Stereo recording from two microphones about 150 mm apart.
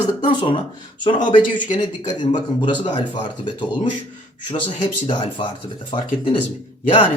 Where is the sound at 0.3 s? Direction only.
35° left (ahead or behind).